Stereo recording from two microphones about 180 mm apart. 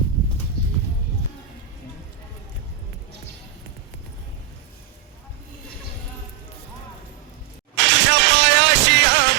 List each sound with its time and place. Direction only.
7.8 s music: 80° right